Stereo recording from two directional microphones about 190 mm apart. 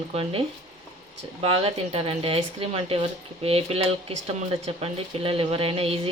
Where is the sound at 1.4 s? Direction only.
30° right (ahead or behind).